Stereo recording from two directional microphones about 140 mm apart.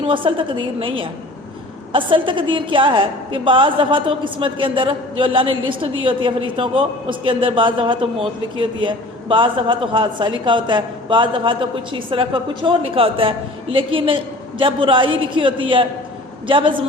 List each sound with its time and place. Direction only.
0.0 s a woman's voice: 40° right (ahead or behind)